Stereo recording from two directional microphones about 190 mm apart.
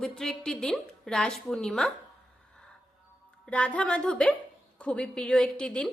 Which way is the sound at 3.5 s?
5° left (ahead or behind).